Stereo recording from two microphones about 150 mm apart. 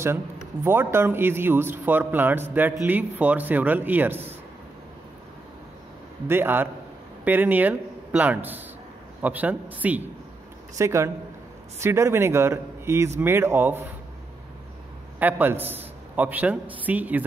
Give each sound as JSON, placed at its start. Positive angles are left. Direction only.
{"t": 0.7, "sound": "speech", "side_deg": -15}
{"t": 6.2, "sound": "a man's voice", "side_deg": -15}
{"t": 15.1, "sound": "a man's voice", "side_deg": -10}